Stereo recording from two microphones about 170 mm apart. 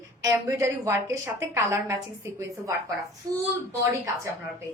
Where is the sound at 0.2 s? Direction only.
20° right (ahead or behind).